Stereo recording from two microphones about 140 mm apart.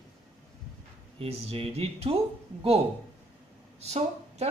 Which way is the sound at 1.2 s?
40° right (ahead or behind).